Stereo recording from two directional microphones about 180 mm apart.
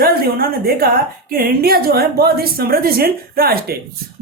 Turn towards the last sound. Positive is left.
turn(degrees=-55)  # may be behind; listen again after turning